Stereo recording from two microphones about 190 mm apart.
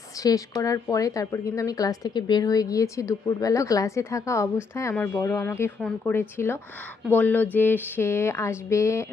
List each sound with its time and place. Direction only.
0.2 s speech: 20° left (ahead or behind)